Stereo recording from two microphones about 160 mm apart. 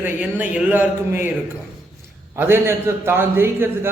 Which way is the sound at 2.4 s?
15° right (ahead or behind).